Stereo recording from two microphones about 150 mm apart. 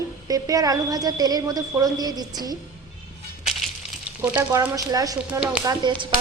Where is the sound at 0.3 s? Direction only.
25° right (ahead or behind).